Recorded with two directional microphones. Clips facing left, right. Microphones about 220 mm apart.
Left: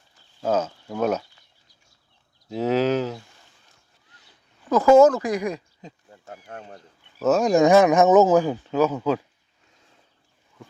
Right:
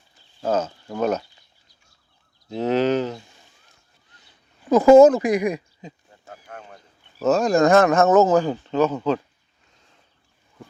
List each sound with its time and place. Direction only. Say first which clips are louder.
0.4 s speech: even; 5° left (ahead or behind)
2.5 s livestock: right 1 dB; 5° left (ahead or behind)
4.9 s speech: right 3 dB; 15° right (ahead or behind)
6.3 s speech: left 1 dB; 35° left (ahead or behind)
7.2 s speech: even; 10° left (ahead or behind)